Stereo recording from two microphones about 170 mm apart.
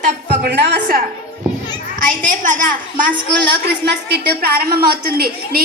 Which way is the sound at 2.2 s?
50° right (ahead or behind).